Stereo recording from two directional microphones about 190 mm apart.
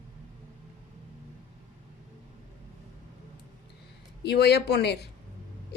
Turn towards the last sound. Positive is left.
turn(degrees=60)  # may be behind; listen again after turning